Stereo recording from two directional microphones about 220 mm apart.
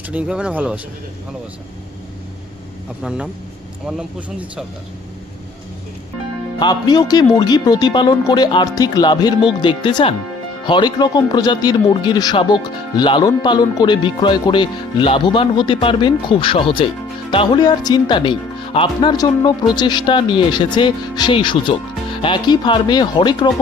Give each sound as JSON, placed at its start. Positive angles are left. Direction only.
{"t": 0.1, "sound": "speech", "side_deg": -5}
{"t": 3.0, "sound": "speech", "side_deg": -5}
{"t": 6.6, "sound": "speech", "side_deg": 20}